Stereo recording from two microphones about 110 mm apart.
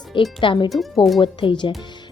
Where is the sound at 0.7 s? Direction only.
Centre (ahead or behind).